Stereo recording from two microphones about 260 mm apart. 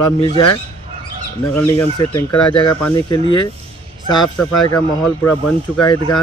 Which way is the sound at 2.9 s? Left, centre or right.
Centre.